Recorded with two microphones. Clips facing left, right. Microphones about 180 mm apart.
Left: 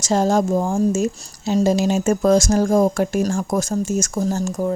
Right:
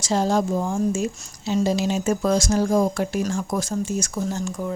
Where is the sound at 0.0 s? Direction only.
45° left (ahead or behind).